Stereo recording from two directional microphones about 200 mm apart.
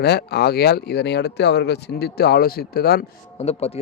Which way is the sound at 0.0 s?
55° left (ahead or behind).